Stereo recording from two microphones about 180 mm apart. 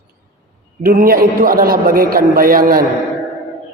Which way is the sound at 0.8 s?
50° right (ahead or behind).